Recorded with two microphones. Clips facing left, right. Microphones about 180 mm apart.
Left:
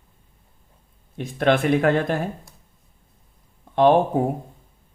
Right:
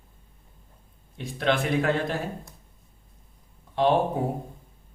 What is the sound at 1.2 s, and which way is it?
Speech, 55° left (ahead or behind).